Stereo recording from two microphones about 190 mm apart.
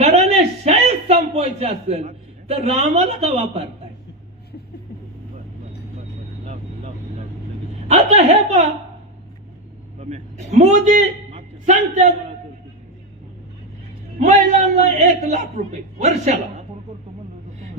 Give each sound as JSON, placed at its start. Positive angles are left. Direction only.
{"t": 0.0, "sound": "a sound", "side_deg": -35}
{"t": 6.4, "sound": "vehicle", "side_deg": -40}
{"t": 7.9, "sound": "speech", "side_deg": -35}
{"t": 10.0, "sound": "a man's voice", "side_deg": -35}
{"t": 14.2, "sound": "a man's voice", "side_deg": -35}